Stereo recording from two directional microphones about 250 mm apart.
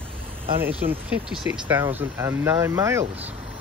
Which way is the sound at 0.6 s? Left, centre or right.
Centre.